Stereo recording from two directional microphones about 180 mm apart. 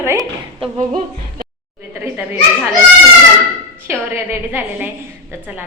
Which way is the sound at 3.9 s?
15° right (ahead or behind).